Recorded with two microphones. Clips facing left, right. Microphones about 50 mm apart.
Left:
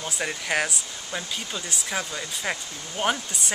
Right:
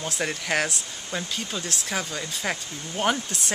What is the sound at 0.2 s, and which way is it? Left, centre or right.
Speech, centre.